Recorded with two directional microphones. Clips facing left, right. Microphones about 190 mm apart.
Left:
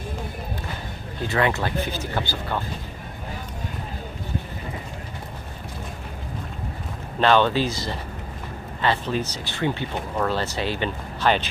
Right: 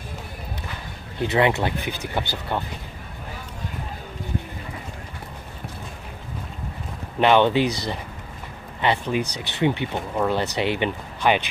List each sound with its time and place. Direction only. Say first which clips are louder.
1.2 s speech: right 3 dB; 20° right (ahead or behind)
7.2 s speech: right 2 dB; 15° right (ahead or behind)
8.8 s speech: right 1 dB; 15° right (ahead or behind)